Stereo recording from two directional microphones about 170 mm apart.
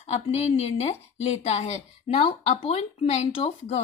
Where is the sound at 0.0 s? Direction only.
40° left (ahead or behind).